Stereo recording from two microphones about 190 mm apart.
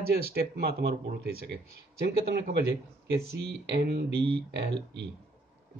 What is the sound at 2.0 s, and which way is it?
Speech, 60° right (ahead or behind).